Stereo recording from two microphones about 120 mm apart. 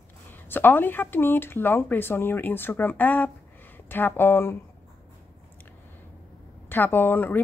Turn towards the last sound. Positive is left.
turn(degrees=15)  # may be behind; listen again after turning